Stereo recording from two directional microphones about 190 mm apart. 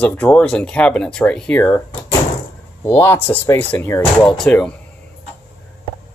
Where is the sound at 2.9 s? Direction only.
10° left (ahead or behind).